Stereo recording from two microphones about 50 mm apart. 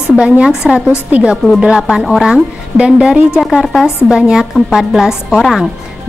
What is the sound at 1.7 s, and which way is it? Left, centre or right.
A woman's voice, centre.